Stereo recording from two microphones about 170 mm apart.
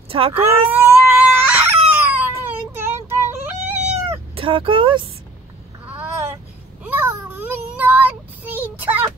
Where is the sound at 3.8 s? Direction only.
35° right (ahead or behind).